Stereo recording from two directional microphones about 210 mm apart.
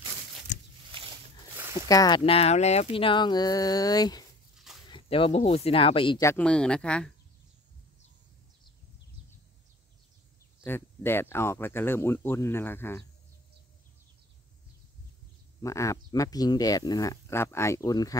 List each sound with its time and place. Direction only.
0.9 s a sound: 25° right (ahead or behind)
1.9 s speech: 20° left (ahead or behind)
10.6 s speech: 10° left (ahead or behind)
15.6 s speech: 15° left (ahead or behind)